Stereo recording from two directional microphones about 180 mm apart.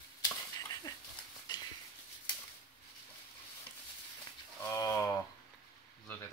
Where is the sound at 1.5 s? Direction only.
25° left (ahead or behind).